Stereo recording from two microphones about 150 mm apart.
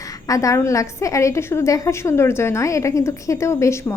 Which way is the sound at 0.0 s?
20° left (ahead or behind).